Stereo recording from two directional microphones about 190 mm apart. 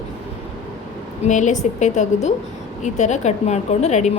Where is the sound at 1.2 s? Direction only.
40° left (ahead or behind).